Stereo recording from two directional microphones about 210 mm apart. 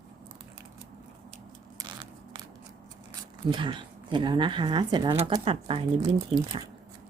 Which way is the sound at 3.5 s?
25° right (ahead or behind).